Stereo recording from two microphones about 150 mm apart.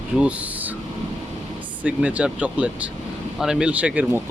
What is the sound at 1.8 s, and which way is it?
Speech, 10° right (ahead or behind).